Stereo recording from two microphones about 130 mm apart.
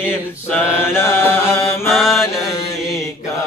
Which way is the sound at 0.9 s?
20° left (ahead or behind).